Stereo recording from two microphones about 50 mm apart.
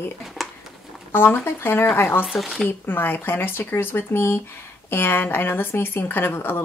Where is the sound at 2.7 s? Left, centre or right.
Left.